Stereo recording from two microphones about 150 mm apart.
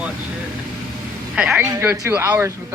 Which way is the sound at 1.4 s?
5° right (ahead or behind).